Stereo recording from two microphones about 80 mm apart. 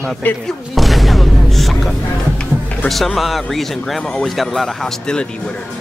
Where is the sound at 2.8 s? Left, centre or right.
Centre.